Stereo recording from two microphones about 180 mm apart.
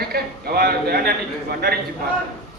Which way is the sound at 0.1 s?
60° right (ahead or behind).